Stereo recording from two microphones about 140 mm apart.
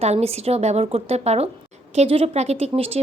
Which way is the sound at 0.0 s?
50° right (ahead or behind).